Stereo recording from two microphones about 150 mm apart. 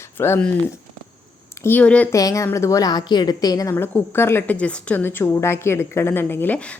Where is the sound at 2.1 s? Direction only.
20° left (ahead or behind).